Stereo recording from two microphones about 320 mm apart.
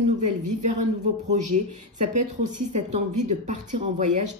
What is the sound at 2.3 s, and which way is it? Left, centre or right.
Speech, right.